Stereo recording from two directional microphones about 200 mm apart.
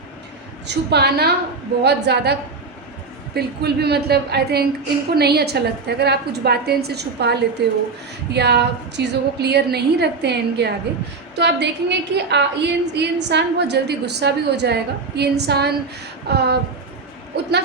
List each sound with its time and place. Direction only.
0.9 s a woman's voice: 55° right (ahead or behind)
3.3 s a woman's voice: 55° right (ahead or behind)